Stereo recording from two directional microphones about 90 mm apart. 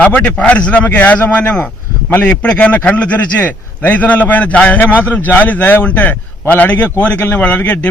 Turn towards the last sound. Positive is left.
turn(degrees=15)  # may be behind; listen again after turning